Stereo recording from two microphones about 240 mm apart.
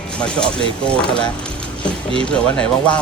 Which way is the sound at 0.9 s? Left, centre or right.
Centre.